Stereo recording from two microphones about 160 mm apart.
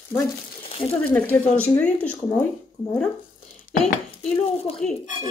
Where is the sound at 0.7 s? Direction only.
40° left (ahead or behind).